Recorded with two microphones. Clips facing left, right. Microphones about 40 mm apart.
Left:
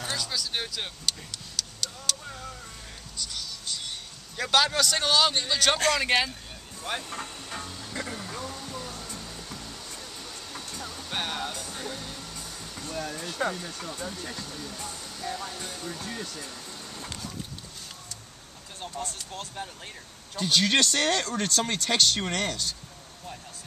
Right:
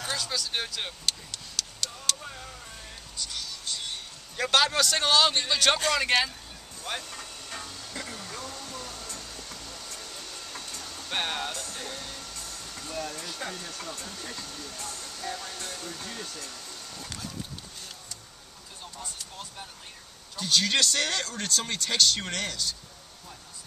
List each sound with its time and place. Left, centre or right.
0.1 s speech: centre
1.6 s a sound: centre
2.1 s vehicle: centre
3.2 s a sound: centre
4.4 s speech: centre
6.0 s speech: centre
7.4 s music: centre
11.1 s music: centre
11.5 s music: centre
13.2 s speech: centre
20.3 s speech: left